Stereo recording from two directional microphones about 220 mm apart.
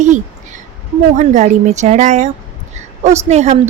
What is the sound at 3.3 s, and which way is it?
Speech, 30° right (ahead or behind).